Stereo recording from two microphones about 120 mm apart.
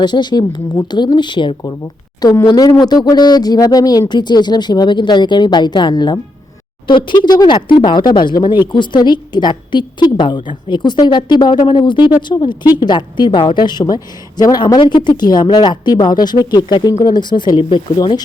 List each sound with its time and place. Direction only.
0.0 s a woman's voice: 35° left (ahead or behind)
2.2 s speech: 25° left (ahead or behind)
2.5 s a woman's voice: 40° left (ahead or behind)